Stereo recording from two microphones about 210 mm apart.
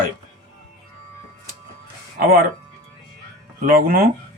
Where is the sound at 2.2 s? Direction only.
45° right (ahead or behind).